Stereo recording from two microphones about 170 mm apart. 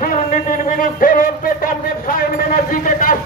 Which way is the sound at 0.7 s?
55° left (ahead or behind).